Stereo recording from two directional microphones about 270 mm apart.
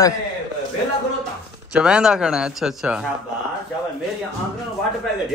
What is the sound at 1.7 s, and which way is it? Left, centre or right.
Speech, centre.